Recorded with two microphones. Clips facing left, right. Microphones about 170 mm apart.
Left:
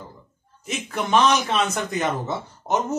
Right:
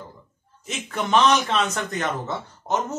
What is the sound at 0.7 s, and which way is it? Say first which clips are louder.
Speech: left 1 dB; 5° left (ahead or behind).